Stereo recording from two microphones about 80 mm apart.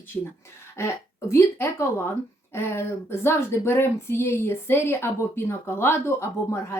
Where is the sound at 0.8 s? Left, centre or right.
Left.